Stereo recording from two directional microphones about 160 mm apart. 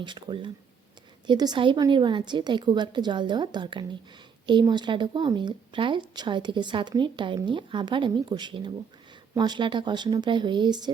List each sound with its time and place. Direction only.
0.0 s speech: 30° right (ahead or behind)